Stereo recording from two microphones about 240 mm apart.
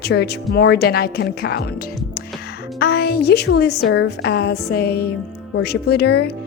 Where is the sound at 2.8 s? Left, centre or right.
Left.